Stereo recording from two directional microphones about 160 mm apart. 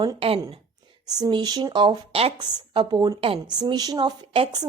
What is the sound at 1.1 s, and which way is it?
A woman's voice, 25° right (ahead or behind).